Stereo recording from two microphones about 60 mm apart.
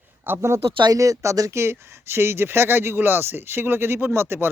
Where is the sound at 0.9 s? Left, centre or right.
Right.